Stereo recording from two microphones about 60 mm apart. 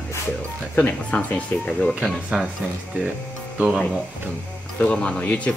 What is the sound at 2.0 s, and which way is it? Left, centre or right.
Speech, centre.